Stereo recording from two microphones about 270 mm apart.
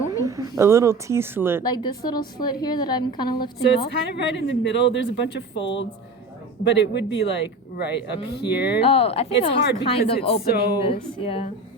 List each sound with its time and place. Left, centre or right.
0.2 s a woman's voice: centre
1.6 s a woman's voice: centre
3.8 s speech: left
8.8 s speech: left
10.4 s speech: left
10.8 s speech: left